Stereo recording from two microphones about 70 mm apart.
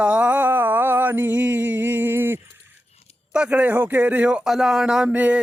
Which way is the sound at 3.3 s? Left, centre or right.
Centre.